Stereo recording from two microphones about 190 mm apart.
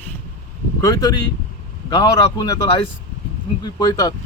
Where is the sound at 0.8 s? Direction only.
20° left (ahead or behind).